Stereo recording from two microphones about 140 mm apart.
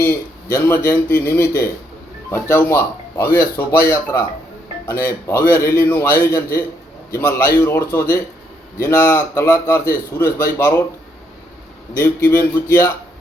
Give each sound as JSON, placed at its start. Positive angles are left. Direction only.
{"t": 0.0, "sound": "a man's voice", "side_deg": 15}
{"t": 11.9, "sound": "speech", "side_deg": 20}